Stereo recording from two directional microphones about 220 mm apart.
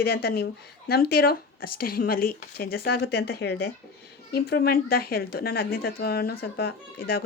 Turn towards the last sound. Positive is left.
turn(degrees=45)  # may be behind; listen again after turning